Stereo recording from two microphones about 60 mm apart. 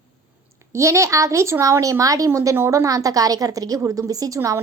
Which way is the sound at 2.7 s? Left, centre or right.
Right.